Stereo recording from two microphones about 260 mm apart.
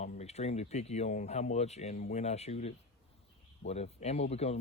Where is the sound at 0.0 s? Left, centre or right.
Left.